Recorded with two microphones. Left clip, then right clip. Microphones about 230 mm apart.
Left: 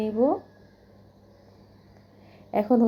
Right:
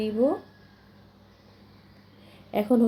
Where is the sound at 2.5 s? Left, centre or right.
Centre.